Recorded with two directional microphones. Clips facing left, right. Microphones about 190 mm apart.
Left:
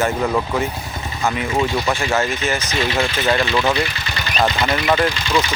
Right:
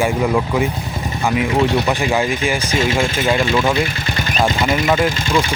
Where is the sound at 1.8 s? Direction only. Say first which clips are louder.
Right 2 dB; 15° right (ahead or behind).